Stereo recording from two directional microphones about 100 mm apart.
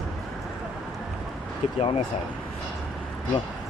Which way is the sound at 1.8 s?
70° left (ahead or behind).